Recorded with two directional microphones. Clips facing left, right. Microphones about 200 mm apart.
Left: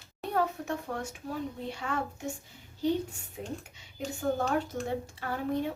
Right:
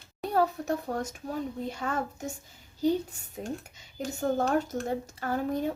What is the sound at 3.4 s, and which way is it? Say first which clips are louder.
A child's voice: right 3 dB; 40° right (ahead or behind).